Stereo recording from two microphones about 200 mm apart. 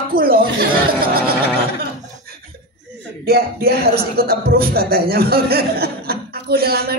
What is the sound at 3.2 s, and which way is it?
Speech, 50° right (ahead or behind).